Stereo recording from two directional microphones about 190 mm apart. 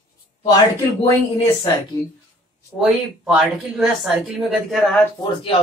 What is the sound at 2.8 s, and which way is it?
Speech, centre (ahead or behind).